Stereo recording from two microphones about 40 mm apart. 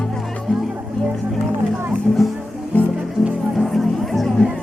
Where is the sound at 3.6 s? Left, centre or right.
Centre.